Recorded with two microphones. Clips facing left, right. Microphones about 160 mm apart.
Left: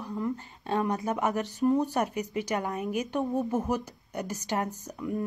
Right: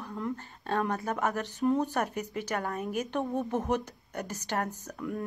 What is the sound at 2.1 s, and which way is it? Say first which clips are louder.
Speech: left 3 dB; 45° right (ahead or behind).